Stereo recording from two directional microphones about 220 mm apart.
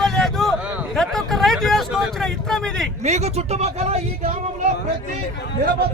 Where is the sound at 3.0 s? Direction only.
30° right (ahead or behind).